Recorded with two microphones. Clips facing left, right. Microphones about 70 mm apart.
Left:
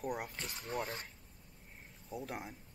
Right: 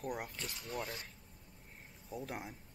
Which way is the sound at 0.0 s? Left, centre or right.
Centre.